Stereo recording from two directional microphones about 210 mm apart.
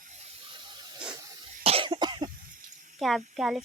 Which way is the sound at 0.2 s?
30° right (ahead or behind).